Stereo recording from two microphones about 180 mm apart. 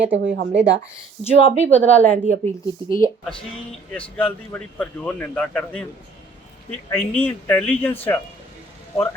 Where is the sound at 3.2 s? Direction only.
5° left (ahead or behind).